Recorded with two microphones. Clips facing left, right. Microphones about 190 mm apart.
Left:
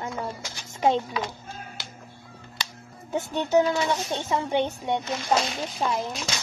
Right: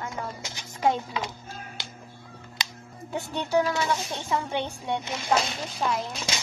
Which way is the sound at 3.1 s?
20° left (ahead or behind).